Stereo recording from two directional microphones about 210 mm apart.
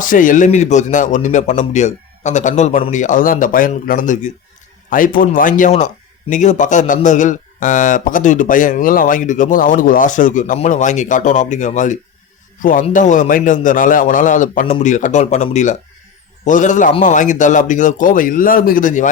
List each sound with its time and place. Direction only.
0.0 s a man's voice: 40° left (ahead or behind)